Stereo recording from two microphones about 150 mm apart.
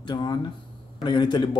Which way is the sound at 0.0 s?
30° left (ahead or behind).